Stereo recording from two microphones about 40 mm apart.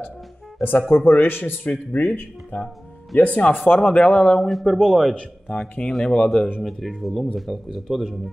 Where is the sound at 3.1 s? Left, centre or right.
Left.